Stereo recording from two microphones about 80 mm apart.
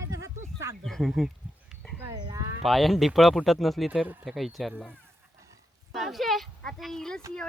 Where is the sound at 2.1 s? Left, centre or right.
Right.